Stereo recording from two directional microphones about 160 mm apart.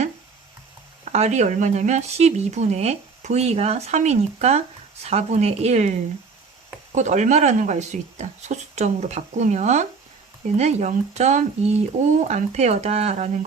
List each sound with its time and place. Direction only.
1.0 s speech: 45° right (ahead or behind)